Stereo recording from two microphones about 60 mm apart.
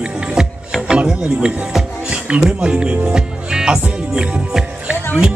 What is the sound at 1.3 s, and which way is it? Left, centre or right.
Speech, centre.